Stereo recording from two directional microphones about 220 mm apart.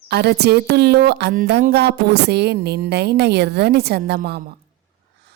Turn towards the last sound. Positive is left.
turn(degrees=-45)  # may be behind; listen again after turning